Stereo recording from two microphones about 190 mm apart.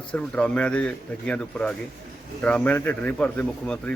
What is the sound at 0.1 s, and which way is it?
Speech, 5° left (ahead or behind).